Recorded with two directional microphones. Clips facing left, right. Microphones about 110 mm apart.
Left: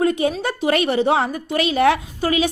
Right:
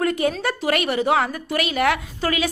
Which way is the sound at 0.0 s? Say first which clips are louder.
Left 2 dB; 20° left (ahead or behind).